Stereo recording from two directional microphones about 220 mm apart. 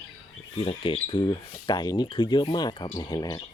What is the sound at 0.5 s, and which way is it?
Speech, 25° left (ahead or behind).